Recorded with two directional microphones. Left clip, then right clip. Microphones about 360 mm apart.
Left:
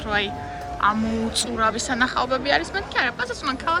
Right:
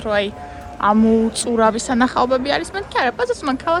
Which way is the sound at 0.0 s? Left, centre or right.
Centre.